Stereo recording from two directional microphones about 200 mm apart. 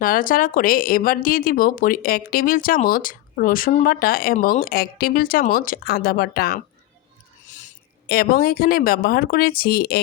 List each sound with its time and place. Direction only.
0.0 s speech: 45° left (ahead or behind)
7.4 s speech: 40° left (ahead or behind)